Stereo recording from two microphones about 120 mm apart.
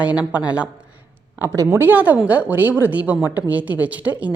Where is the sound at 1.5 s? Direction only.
30° right (ahead or behind).